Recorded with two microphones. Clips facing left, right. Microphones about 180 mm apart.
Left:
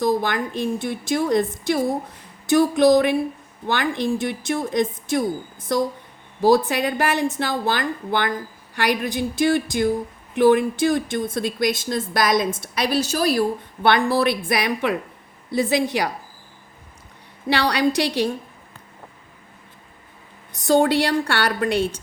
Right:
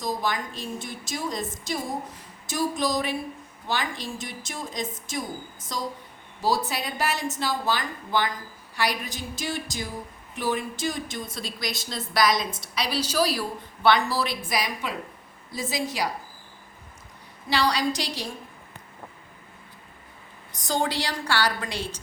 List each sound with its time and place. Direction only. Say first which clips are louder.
0.0 s a woman's voice: left 8 dB; 65° left (ahead or behind)
17.5 s a woman's voice: left 5 dB; 60° left (ahead or behind)
20.7 s a woman's voice: left 10 dB; 60° left (ahead or behind)